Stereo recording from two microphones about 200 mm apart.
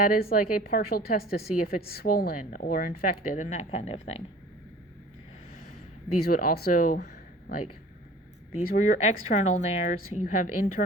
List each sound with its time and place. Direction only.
0.0 s a woman's voice: 45° left (ahead or behind); by 4.2 s 30° left (ahead or behind)
6.2 s a woman's voice: 45° left (ahead or behind)
10.0 s speech: 90° left
10.2 s a woman's voice: 40° left (ahead or behind)